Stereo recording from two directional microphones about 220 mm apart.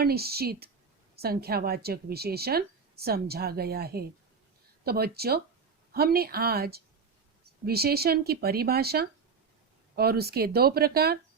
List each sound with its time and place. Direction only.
0.0 s speech: 45° right (ahead or behind)